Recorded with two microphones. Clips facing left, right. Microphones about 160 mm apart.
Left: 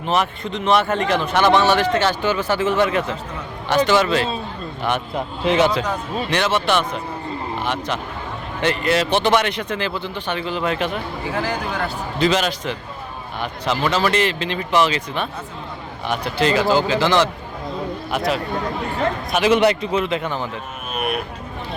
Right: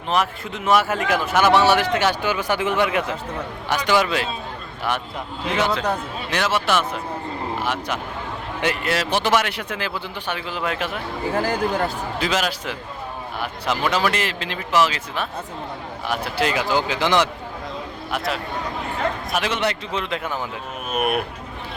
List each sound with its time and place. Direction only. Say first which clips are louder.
0.1 s a man's voice: left 1 dB; centre (ahead or behind)
6.3 s a man's voice: left 2 dB; 5° right (ahead or behind)
11.3 s speech: right 3 dB; 45° right (ahead or behind)
12.2 s a man's voice: left 5 dB; 5° right (ahead or behind)
18.1 s a man's voice: left 4 dB; centre (ahead or behind)
19.5 s a man's voice: left 7 dB; 15° left (ahead or behind)
20.9 s speech: right 2 dB; 50° right (ahead or behind)